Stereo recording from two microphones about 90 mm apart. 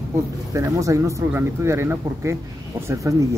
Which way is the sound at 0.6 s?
35° right (ahead or behind).